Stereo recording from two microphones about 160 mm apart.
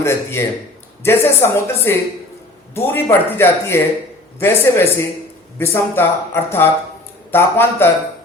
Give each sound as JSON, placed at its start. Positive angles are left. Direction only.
{"t": 0.0, "sound": "speech", "side_deg": 15}